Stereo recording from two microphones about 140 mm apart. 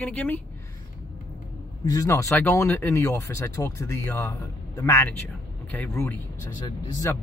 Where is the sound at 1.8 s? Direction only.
25° left (ahead or behind).